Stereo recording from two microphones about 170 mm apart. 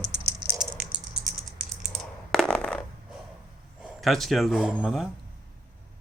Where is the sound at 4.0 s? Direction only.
Centre (ahead or behind).